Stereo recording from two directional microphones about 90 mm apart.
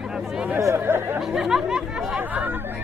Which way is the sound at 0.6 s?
30° right (ahead or behind).